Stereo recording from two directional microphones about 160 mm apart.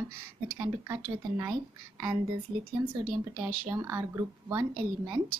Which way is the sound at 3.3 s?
20° right (ahead or behind).